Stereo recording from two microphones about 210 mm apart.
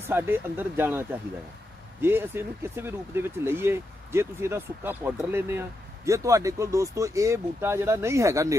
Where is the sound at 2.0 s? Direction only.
10° right (ahead or behind).